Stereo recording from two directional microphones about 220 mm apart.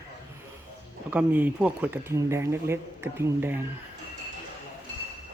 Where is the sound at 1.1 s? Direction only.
10° right (ahead or behind).